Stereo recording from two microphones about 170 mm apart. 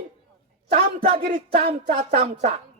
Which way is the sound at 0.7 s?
35° right (ahead or behind).